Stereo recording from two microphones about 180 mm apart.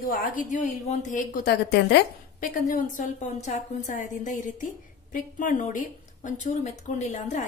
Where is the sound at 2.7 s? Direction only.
45° left (ahead or behind).